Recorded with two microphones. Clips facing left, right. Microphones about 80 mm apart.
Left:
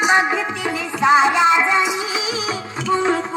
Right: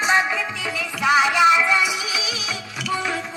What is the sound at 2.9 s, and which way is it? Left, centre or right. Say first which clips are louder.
Music: left 7 dB; left.